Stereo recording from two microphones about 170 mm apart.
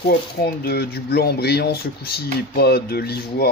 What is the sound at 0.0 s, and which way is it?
Speech, 65° left (ahead or behind).